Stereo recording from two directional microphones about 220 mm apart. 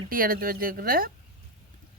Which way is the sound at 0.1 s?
40° right (ahead or behind).